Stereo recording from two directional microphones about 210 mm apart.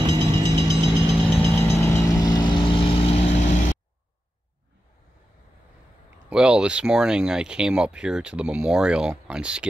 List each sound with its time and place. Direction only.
0.0 s vehicle: 20° right (ahead or behind)
1.4 s vehicle: 10° left (ahead or behind); by 3.6 s 30° left (ahead or behind)
6.3 s speech: 5° right (ahead or behind)